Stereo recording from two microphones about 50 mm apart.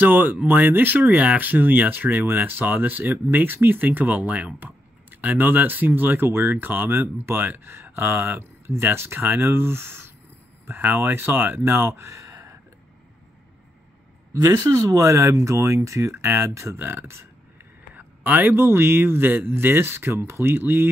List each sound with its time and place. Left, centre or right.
0.0 s a man's voice: right
12.1 s a sound: right
14.4 s speech: right
16.7 s a man's voice: right
17.9 s a man's voice: right